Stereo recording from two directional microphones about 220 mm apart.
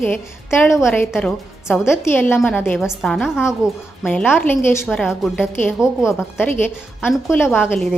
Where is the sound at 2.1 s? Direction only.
10° left (ahead or behind).